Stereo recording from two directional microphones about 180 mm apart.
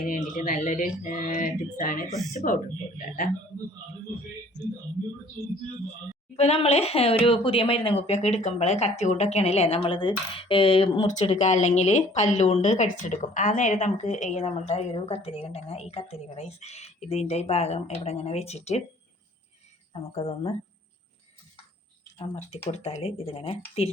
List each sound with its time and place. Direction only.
0.0 s speech: 45° left (ahead or behind)
6.3 s speech: 35° left (ahead or behind)
19.9 s speech: 30° left (ahead or behind)
22.2 s speech: 35° left (ahead or behind)